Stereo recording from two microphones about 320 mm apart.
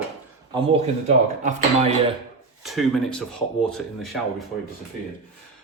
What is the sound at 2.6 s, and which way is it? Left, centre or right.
Speech, centre.